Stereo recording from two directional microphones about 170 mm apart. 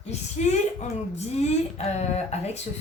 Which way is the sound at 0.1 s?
45° left (ahead or behind).